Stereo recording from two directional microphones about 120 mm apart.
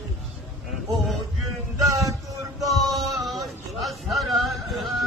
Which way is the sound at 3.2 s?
Centre (ahead or behind).